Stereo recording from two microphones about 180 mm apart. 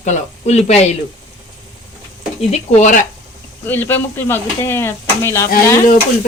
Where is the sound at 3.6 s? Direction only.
10° left (ahead or behind).